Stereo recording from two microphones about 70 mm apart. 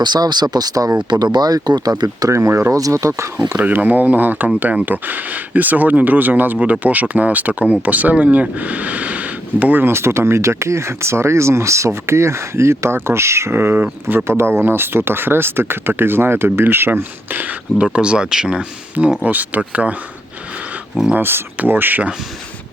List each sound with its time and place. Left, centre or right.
0.0 s speech: right
1.1 s speech: right
2.3 s speech: right
3.5 s speech: right
17.8 s speech: centre
21.1 s speech: right